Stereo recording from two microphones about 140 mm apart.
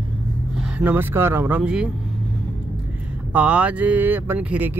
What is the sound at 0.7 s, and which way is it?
Speech, 15° right (ahead or behind).